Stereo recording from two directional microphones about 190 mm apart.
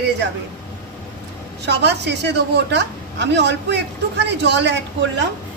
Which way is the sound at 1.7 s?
65° right (ahead or behind).